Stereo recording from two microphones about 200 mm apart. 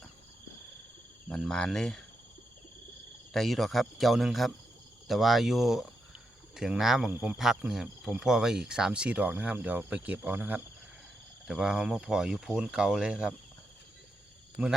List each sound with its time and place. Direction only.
1.3 s speech: centre (ahead or behind)
3.3 s speech: centre (ahead or behind)
14.6 s speech: 5° right (ahead or behind)